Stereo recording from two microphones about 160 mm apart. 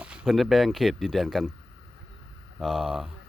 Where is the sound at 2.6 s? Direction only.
5° right (ahead or behind).